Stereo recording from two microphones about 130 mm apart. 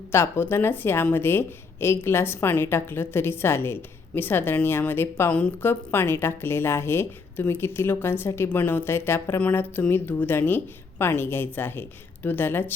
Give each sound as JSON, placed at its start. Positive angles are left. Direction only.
{"t": 0.1, "sound": "speech", "side_deg": 20}